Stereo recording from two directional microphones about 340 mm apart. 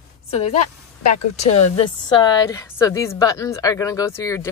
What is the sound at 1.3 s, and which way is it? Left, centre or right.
A woman's voice, centre.